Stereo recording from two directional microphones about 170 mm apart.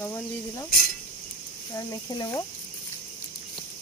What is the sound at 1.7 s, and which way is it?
Speech, 20° left (ahead or behind).